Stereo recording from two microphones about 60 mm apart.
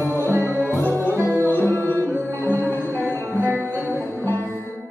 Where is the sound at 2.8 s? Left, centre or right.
Left.